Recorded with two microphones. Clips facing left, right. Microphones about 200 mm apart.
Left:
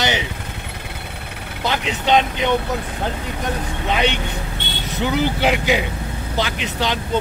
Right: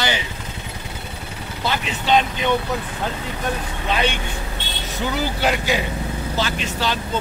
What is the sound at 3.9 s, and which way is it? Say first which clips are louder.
Speech: left 2 dB; 20° left (ahead or behind).